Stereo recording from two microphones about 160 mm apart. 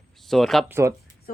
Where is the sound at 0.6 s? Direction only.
15° right (ahead or behind).